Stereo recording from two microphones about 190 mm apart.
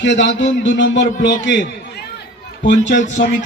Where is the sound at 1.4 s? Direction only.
70° left (ahead or behind).